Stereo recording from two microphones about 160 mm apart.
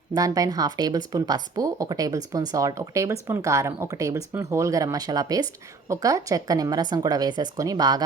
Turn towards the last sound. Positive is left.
turn(degrees=-25)  # may be behind; listen again after turning